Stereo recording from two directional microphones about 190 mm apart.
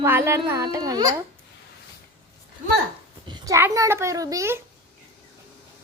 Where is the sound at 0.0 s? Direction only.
15° right (ahead or behind).